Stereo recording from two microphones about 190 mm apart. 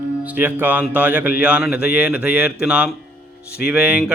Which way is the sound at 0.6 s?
10° right (ahead or behind).